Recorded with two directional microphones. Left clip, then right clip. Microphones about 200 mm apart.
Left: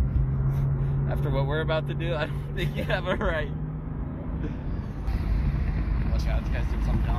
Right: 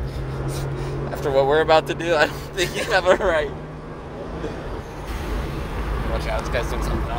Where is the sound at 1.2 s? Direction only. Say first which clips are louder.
Right 13 dB; 15° right (ahead or behind).